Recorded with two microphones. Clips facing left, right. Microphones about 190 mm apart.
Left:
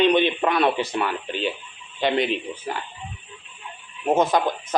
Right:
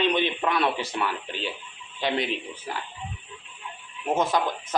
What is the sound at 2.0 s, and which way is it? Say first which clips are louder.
Speech: left 5 dB; 5° right (ahead or behind).